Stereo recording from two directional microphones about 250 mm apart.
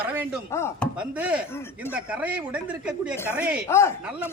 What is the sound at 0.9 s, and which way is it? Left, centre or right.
Speech, centre.